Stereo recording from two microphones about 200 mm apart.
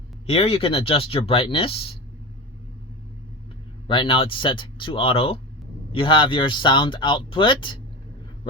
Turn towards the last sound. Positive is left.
turn(degrees=25)  # may be behind; listen again after turning